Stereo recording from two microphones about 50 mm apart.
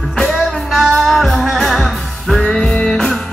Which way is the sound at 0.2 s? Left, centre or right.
Centre.